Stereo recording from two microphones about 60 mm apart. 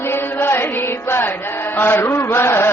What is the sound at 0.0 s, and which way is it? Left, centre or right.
Music, left.